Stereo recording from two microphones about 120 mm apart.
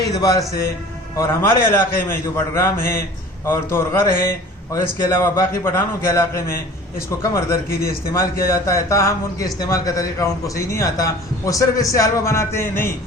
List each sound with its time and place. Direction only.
0.1 s a man's voice: 30° left (ahead or behind)
8.1 s a man's voice: 25° left (ahead or behind)